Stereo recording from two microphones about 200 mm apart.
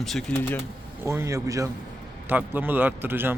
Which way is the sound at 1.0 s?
15° right (ahead or behind).